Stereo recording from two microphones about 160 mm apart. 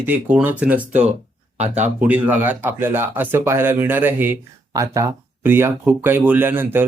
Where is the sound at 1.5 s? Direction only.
45° right (ahead or behind).